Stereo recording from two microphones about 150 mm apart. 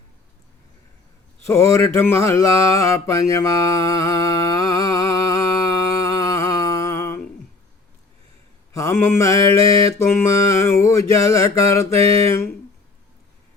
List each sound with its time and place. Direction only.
1.5 s mantra: 20° left (ahead or behind)
5.9 s a sound: 20° left (ahead or behind)
8.7 s mantra: 20° left (ahead or behind)